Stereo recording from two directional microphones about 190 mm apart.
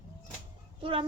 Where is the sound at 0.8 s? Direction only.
30° right (ahead or behind).